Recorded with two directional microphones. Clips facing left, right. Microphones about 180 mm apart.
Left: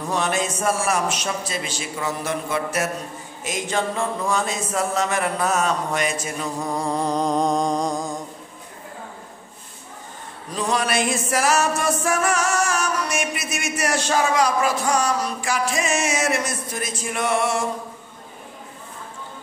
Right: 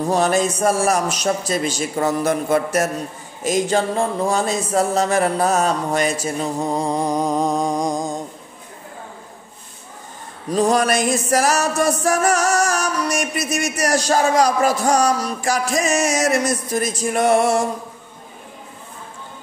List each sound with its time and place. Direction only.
0.0 s music: 35° right (ahead or behind); by 8.2 s 15° right (ahead or behind)
10.5 s music: 40° right (ahead or behind)